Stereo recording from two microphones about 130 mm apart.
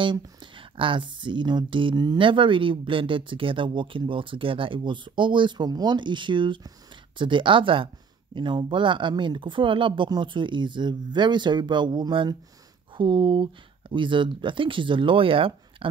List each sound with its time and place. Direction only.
0.0 s speech: 40° right (ahead or behind)